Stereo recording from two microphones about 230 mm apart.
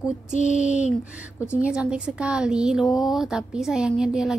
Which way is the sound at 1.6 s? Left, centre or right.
Centre.